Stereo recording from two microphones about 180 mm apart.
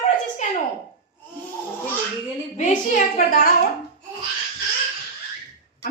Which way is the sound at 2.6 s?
45° left (ahead or behind).